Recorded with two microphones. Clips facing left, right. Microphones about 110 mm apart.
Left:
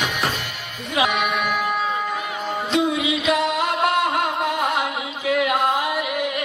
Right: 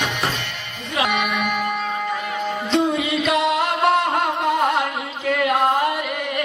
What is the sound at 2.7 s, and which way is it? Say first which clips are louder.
Music: right 1 dB; centre (ahead or behind).